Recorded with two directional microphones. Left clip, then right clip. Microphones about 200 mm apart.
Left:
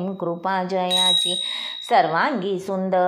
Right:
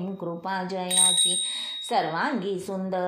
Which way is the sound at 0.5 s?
25° left (ahead or behind).